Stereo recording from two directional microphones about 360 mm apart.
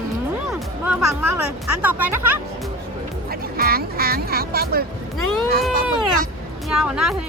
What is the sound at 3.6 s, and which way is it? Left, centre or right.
Speech, right.